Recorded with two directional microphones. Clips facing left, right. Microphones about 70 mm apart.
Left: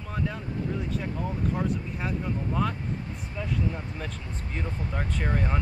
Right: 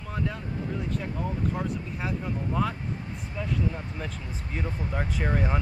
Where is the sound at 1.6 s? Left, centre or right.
Centre.